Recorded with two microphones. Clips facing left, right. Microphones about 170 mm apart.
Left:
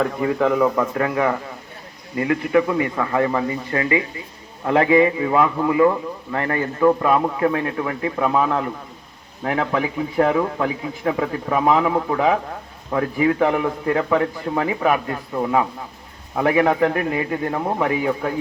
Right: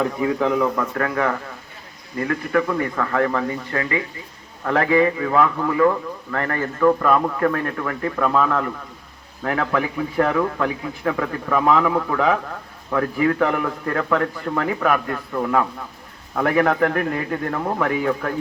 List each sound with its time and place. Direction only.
0.0 s speech: centre (ahead or behind)
0.8 s a man's voice: 15° left (ahead or behind)